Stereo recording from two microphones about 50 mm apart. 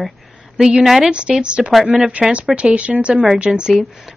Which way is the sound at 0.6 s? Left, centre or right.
Centre.